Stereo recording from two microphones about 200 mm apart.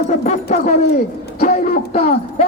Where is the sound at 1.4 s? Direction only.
40° left (ahead or behind).